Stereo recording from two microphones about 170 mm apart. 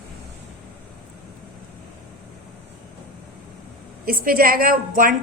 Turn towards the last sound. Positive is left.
turn(degrees=-55)  # may be behind; listen again after turning